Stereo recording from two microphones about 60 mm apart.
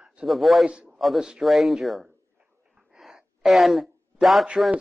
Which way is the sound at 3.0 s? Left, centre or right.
Centre.